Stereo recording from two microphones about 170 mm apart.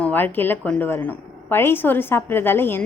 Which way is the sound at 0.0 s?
10° left (ahead or behind).